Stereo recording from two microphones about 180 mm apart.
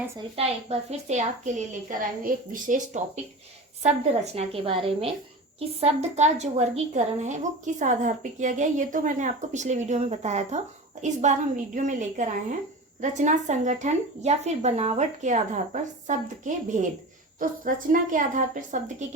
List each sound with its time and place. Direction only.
0.2 s a woman's voice: 35° right (ahead or behind)
4.4 s a woman's voice: 35° right (ahead or behind)